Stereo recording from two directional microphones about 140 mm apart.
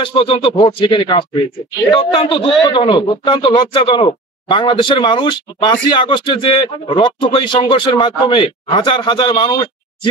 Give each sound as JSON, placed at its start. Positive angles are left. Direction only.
{"t": 0.0, "sound": "a man's voice", "side_deg": 40}